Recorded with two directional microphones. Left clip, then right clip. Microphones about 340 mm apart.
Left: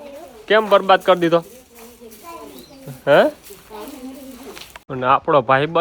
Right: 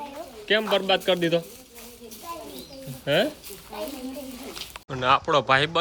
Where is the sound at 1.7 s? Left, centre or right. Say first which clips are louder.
Left 2 dB; centre.